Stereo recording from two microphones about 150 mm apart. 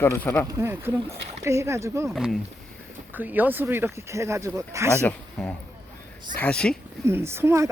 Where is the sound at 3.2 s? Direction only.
10° right (ahead or behind).